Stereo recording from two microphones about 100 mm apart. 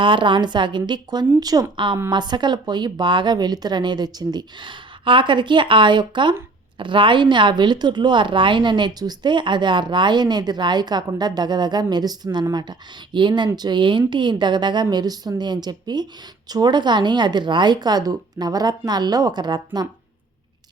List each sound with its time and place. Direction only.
0.0 s a woman's voice: 55° right (ahead or behind); by 1.6 s 40° right (ahead or behind)
1.7 s a woman's voice: 55° right (ahead or behind)